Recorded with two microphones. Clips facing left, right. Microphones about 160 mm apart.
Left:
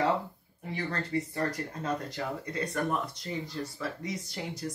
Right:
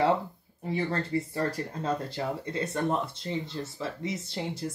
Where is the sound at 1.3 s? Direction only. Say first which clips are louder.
Right 2 dB; 30° right (ahead or behind).